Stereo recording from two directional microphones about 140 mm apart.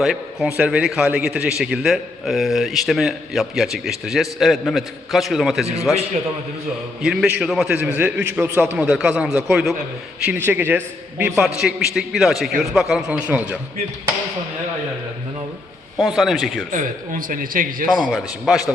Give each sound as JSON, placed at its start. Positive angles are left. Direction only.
{"t": 0.0, "sound": "a man's voice", "side_deg": 0}
{"t": 11.4, "sound": "a man's voice", "side_deg": -5}
{"t": 16.0, "sound": "a man's voice", "side_deg": 0}
{"t": 16.7, "sound": "a man's voice", "side_deg": -75}
{"t": 18.0, "sound": "a man's voice", "side_deg": 0}